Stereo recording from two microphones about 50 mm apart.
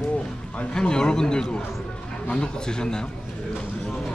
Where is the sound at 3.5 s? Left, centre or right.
Centre.